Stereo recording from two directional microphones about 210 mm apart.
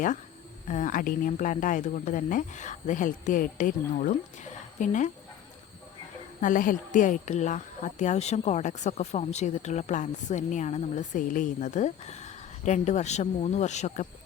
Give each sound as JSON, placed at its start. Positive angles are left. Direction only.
{"t": 0.7, "sound": "speech", "side_deg": 40}
{"t": 6.4, "sound": "speech", "side_deg": 40}